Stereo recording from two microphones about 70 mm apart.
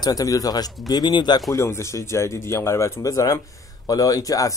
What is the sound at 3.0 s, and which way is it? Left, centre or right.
Speech, left.